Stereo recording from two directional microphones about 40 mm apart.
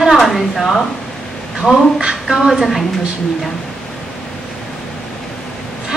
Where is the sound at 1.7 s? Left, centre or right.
Centre.